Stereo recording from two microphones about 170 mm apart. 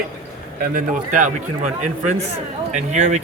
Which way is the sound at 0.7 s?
50° right (ahead or behind).